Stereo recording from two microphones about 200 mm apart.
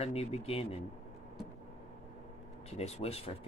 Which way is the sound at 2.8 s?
30° left (ahead or behind).